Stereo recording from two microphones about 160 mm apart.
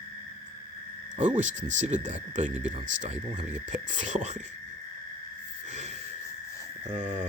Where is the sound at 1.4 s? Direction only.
50° right (ahead or behind).